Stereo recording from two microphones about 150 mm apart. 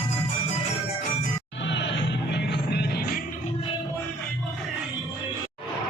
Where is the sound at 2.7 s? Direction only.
90° left.